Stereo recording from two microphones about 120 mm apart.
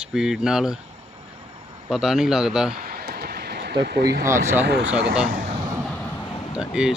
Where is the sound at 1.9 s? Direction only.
5° right (ahead or behind).